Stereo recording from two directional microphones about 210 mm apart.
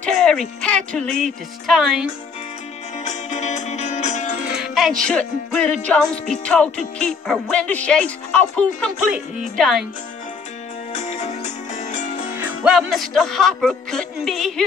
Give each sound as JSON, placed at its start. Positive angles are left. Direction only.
{"t": 0.0, "sound": "music", "side_deg": 5}
{"t": 3.0, "sound": "music", "side_deg": 35}
{"t": 4.5, "sound": "music", "side_deg": 0}
{"t": 10.9, "sound": "music", "side_deg": 35}
{"t": 12.6, "sound": "music", "side_deg": 0}